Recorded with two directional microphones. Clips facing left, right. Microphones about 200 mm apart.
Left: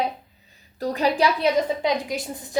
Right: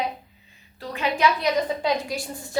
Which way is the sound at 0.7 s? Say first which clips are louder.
Left 5 dB; 40° left (ahead or behind).